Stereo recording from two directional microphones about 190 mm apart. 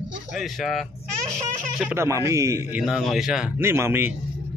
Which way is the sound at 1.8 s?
10° right (ahead or behind).